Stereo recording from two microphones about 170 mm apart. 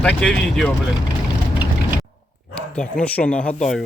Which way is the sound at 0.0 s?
5° left (ahead or behind).